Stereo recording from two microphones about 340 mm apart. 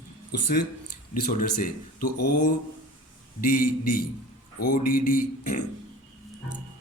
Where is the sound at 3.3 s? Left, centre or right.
Left.